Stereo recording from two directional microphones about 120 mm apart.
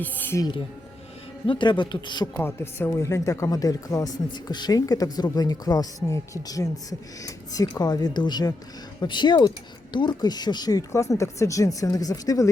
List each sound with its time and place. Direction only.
0.0 s speech: 20° left (ahead or behind)
1.5 s speech: 40° left (ahead or behind)
2.2 s speech: 20° left (ahead or behind)